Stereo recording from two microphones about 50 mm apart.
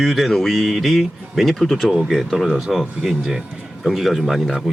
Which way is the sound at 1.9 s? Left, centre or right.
Centre.